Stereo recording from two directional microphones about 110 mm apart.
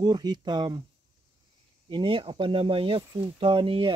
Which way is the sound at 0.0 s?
40° right (ahead or behind).